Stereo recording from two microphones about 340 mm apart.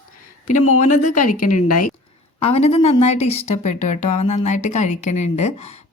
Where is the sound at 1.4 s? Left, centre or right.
Left.